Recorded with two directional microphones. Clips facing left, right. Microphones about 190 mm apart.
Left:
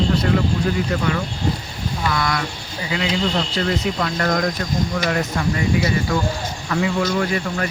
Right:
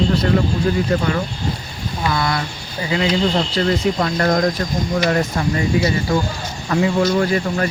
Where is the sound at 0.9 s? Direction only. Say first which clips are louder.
Right 3 dB; 35° right (ahead or behind).